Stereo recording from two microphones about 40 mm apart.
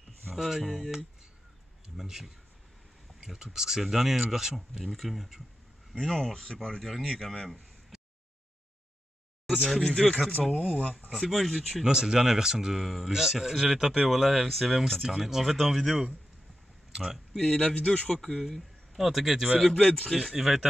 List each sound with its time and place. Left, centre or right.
0.4 s speech: centre
2.0 s a man's voice: centre
5.9 s speech: centre
6.8 s speech: centre
9.5 s speech: centre
11.8 s a man's voice: centre
16.9 s speech: centre
17.3 s speech: centre
18.1 s speech: centre
18.4 s speech: centre
19.8 s speech: left
20.3 s speech: centre